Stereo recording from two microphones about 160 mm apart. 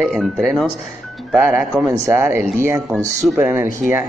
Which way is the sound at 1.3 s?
15° right (ahead or behind).